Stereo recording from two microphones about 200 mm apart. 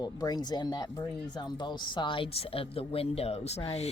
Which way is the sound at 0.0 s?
20° left (ahead or behind).